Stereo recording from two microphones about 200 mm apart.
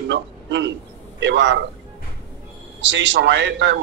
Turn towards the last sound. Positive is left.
turn(degrees=-60)  # may be behind; listen again after turning